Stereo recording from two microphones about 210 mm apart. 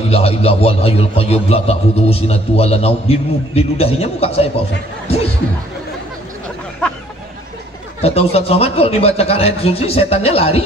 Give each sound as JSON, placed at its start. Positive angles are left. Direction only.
{"t": 0.1, "sound": "a man's voice", "side_deg": 30}
{"t": 8.0, "sound": "a man's voice", "side_deg": 30}